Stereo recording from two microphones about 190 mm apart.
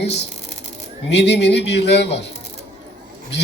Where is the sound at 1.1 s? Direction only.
65° left (ahead or behind).